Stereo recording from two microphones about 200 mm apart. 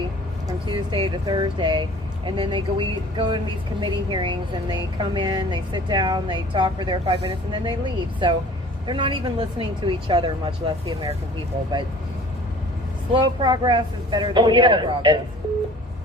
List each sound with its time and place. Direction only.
0.4 s a woman's voice: 25° right (ahead or behind)
13.1 s a woman's voice: 25° right (ahead or behind)